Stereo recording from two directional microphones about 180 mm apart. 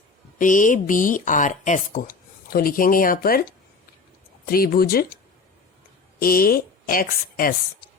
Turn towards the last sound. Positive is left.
turn(degrees=50)  # may be behind; listen again after turning